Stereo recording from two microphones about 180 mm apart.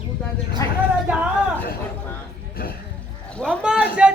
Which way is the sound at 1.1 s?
10° right (ahead or behind).